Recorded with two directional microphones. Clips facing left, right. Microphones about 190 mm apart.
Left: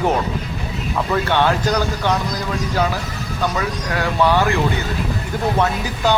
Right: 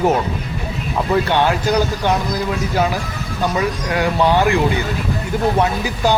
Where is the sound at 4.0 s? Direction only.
20° right (ahead or behind).